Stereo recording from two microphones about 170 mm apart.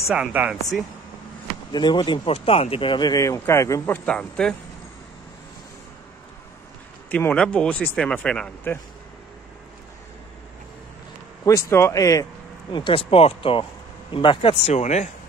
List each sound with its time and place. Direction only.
0.0 s speech: 5° right (ahead or behind)
1.7 s speech: 25° left (ahead or behind); by 4.6 s 5° left (ahead or behind)
7.1 s speech: 10° left (ahead or behind)
11.4 s speech: 15° left (ahead or behind)
12.7 s speech: 30° left (ahead or behind)